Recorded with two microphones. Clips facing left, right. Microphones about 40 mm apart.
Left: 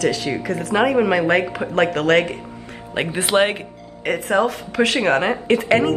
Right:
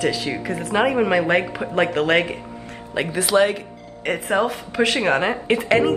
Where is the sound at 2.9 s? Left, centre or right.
Left.